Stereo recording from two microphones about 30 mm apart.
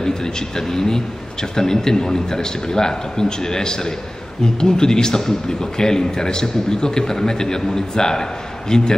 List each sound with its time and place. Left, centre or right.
0.6 s a man's voice: centre